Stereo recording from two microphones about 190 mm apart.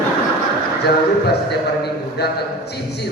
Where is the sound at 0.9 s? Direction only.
60° left (ahead or behind).